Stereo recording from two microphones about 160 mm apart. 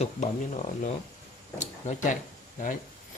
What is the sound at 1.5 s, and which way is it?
Speech, 50° left (ahead or behind).